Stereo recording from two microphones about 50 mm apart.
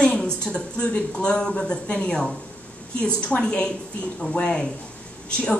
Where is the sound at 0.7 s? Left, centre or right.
Left.